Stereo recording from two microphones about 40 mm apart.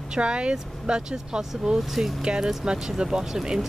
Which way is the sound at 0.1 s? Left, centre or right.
Right.